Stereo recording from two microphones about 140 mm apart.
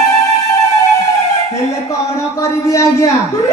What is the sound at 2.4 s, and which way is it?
Speech, 20° left (ahead or behind).